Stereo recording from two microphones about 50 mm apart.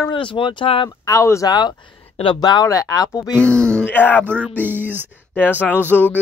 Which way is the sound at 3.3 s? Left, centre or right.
Left.